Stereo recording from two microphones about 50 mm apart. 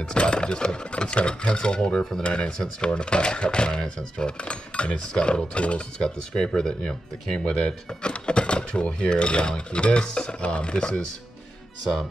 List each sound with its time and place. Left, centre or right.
0.0 s speech: centre